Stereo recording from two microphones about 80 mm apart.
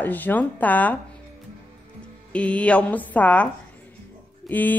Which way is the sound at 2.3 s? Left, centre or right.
Centre.